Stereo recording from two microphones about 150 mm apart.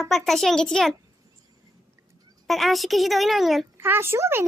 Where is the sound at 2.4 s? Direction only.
Centre (ahead or behind).